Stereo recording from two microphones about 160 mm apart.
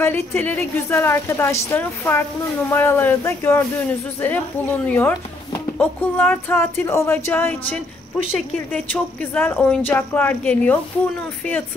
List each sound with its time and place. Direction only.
0.0 s speech: 15° left (ahead or behind)
4.8 s speech: 10° left (ahead or behind)